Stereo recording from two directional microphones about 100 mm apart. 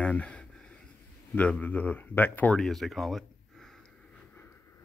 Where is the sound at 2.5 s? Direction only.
Centre (ahead or behind).